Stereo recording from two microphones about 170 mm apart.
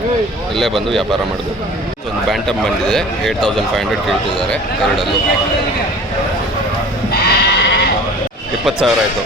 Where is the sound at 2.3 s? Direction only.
5° left (ahead or behind).